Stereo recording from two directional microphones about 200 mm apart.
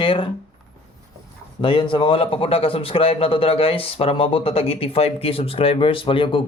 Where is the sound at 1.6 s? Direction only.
25° left (ahead or behind).